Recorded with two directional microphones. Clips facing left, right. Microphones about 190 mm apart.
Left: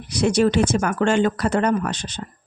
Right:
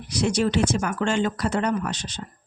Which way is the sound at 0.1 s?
60° left (ahead or behind).